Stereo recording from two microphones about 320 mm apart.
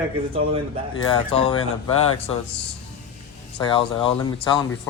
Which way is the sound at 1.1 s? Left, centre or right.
Centre.